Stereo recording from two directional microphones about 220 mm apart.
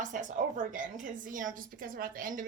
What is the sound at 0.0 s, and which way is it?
A woman's voice, 35° right (ahead or behind).